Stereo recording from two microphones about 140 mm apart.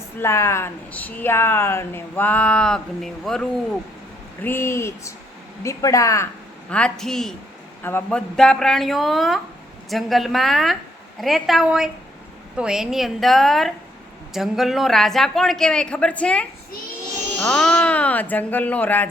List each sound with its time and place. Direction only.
0.2 s a woman's voice: 20° left (ahead or behind); by 3.4 s 5° left (ahead or behind)
4.4 s speech: 15° left (ahead or behind)
6.7 s a woman's voice: 5° left (ahead or behind)
7.8 s a man's voice: 15° left (ahead or behind)
8.4 s a woman's voice: 5° left (ahead or behind)